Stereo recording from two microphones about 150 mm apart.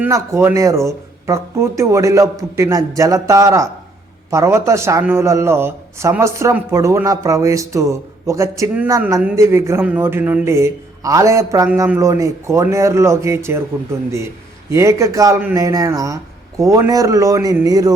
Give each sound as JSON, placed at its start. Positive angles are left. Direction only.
{"t": 0.0, "sound": "a man's voice", "side_deg": -20}
{"t": 14.7, "sound": "a man's voice", "side_deg": -20}